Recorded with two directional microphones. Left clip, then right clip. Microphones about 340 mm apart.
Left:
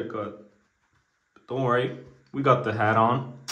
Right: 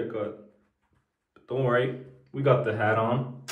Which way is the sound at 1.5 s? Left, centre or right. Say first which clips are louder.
Even; centre.